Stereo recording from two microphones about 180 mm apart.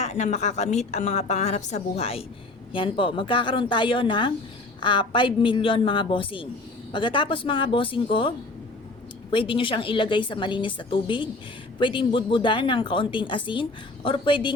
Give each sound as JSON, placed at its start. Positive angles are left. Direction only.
{"t": 0.0, "sound": "a woman's voice", "side_deg": 40}
{"t": 9.3, "sound": "speech", "side_deg": 30}